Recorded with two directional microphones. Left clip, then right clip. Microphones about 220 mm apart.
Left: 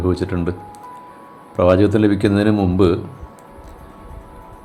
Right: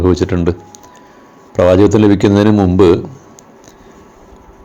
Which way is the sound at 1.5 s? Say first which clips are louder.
Right 5 dB; 20° right (ahead or behind).